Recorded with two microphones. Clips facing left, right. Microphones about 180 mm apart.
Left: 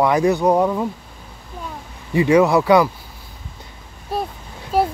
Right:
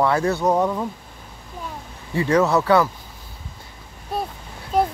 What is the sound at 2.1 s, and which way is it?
Speech, 15° left (ahead or behind).